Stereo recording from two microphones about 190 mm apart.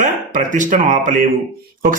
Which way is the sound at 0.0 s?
45° right (ahead or behind).